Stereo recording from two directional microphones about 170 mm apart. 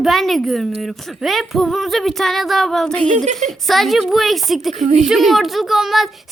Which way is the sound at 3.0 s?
45° right (ahead or behind).